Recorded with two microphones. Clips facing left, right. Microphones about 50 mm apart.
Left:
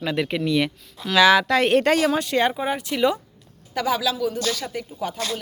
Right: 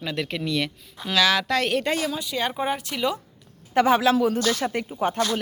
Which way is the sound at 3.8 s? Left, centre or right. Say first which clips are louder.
Right 5 dB; right.